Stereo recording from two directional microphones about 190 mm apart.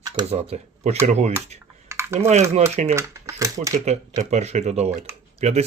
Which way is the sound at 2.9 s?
15° right (ahead or behind).